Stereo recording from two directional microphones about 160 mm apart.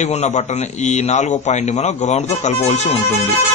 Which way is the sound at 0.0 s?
45° left (ahead or behind).